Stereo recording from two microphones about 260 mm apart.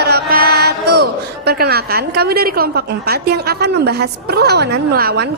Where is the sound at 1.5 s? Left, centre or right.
Right.